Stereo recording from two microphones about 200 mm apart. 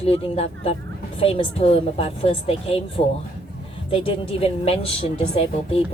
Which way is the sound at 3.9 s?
25° left (ahead or behind).